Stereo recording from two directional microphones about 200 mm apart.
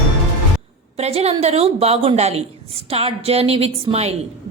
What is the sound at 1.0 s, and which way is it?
A woman's voice, 30° right (ahead or behind).